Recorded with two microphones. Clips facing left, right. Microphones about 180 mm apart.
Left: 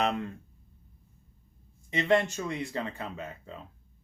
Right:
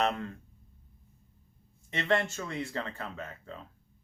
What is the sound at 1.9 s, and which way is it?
Speech, 15° left (ahead or behind).